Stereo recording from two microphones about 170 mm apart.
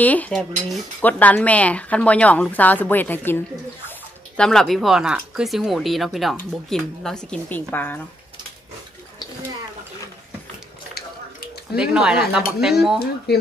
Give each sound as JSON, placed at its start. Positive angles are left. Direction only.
{"t": 0.0, "sound": "a woman's voice", "side_deg": 10}
{"t": 4.4, "sound": "a woman's voice", "side_deg": 0}
{"t": 11.7, "sound": "speech", "side_deg": -5}
{"t": 13.3, "sound": "speech", "side_deg": 75}